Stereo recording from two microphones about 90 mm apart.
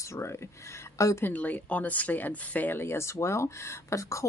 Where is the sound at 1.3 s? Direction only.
20° left (ahead or behind).